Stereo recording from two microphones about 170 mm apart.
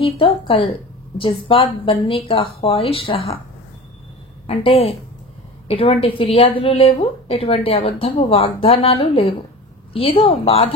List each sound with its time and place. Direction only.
0.0 s a woman's voice: 30° left (ahead or behind)
4.5 s a woman's voice: 35° left (ahead or behind)